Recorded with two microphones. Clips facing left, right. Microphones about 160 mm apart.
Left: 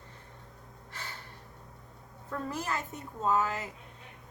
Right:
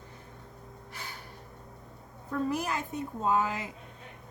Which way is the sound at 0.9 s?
15° right (ahead or behind).